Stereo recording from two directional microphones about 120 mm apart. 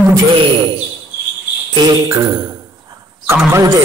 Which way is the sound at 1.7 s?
35° right (ahead or behind).